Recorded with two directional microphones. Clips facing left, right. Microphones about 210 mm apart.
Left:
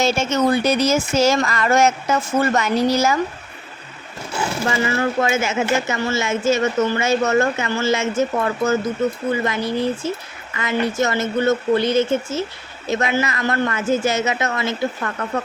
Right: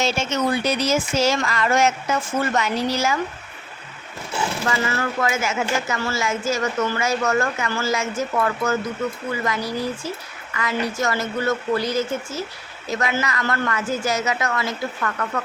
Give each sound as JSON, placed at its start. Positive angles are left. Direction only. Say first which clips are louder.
{"t": 0.0, "sound": "speech", "louder": "left 4 dB", "side_deg": 45}
{"t": 4.6, "sound": "speech", "louder": "left 6 dB", "side_deg": 20}